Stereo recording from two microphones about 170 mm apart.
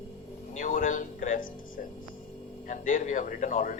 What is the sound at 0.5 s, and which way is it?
Speech, 50° left (ahead or behind).